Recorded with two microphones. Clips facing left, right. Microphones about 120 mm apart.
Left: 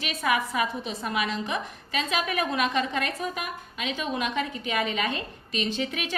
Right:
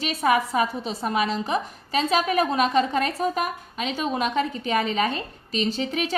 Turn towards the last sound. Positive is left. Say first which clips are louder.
# right 4 dB
turn(degrees=-35)  # may be behind; listen again after turning